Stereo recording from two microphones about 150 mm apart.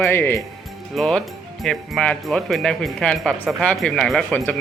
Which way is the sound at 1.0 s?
5° left (ahead or behind).